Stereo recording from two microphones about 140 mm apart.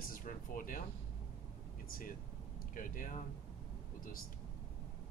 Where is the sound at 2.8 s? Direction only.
70° left (ahead or behind).